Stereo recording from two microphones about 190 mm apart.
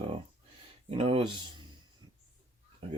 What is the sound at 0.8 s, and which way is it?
Speech, 30° right (ahead or behind).